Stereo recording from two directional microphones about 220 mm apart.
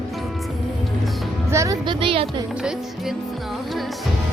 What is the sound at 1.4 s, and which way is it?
Speech, 15° right (ahead or behind).